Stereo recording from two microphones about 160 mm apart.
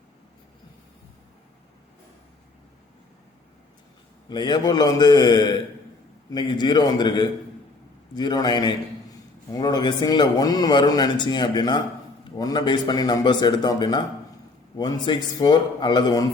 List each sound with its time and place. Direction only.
4.3 s a man's voice: 25° left (ahead or behind)